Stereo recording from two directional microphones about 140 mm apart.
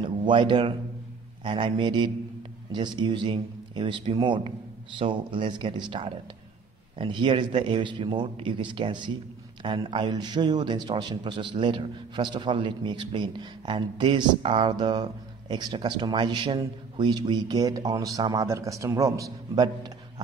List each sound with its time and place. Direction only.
0.0 s a man's voice: 35° right (ahead or behind)